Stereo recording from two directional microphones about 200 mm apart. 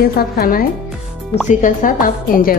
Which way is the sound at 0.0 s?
50° left (ahead or behind).